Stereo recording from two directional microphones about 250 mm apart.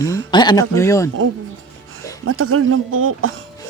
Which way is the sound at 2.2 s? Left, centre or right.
Right.